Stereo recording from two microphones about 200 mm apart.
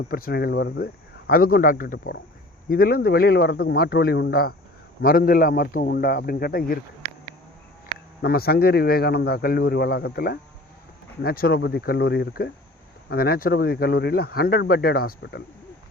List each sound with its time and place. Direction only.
0.1 s speech: 50° left (ahead or behind)
8.2 s speech: 50° left (ahead or behind)